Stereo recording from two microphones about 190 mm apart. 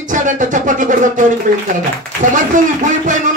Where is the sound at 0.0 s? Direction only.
40° right (ahead or behind).